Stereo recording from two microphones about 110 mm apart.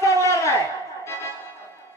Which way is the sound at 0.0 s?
25° left (ahead or behind).